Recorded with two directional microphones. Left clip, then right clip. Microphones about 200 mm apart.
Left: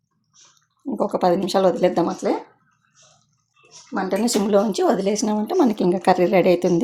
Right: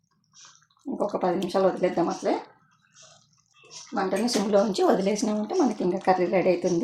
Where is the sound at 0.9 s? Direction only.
55° left (ahead or behind).